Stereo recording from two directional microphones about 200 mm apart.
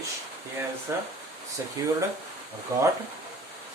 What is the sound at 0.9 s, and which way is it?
Speech, 10° right (ahead or behind).